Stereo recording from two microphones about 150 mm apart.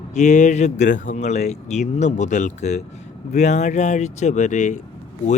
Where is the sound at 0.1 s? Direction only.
50° left (ahead or behind).